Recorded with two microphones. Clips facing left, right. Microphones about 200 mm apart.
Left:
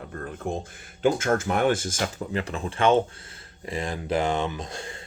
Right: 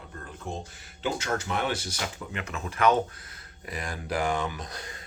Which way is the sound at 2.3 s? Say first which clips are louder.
Left 6 dB; 35° left (ahead or behind).